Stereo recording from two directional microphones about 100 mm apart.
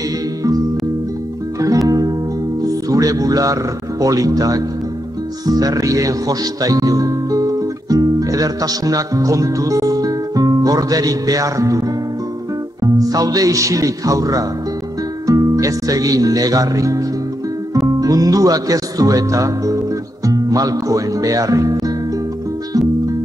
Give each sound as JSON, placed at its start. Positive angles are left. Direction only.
{"t": 1.9, "sound": "music", "side_deg": -40}
{"t": 4.0, "sound": "speech", "side_deg": -35}
{"t": 12.8, "sound": "a man's voice", "side_deg": -35}
{"t": 22.7, "sound": "music", "side_deg": -35}